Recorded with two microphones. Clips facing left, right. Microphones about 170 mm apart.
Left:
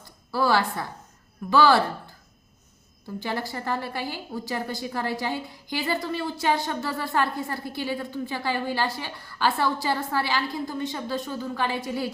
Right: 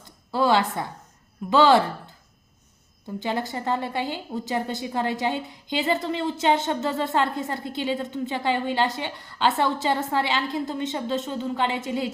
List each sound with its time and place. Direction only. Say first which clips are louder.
0.3 s a woman's voice: right 2 dB; 20° right (ahead or behind)
3.2 s a woman's voice: right 3 dB; 20° right (ahead or behind)